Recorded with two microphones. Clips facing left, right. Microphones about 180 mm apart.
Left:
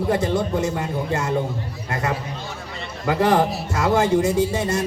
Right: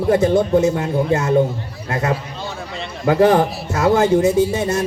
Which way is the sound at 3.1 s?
50° right (ahead or behind).